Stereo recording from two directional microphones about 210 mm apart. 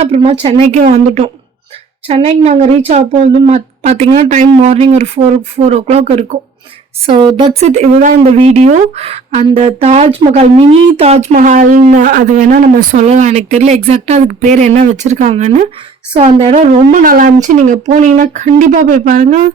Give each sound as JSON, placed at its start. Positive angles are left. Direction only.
{"t": 0.0, "sound": "a woman's voice", "side_deg": -25}
{"t": 7.7, "sound": "a woman's voice", "side_deg": -30}